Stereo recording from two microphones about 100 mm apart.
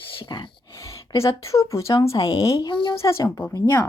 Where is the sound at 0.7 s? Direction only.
30° left (ahead or behind).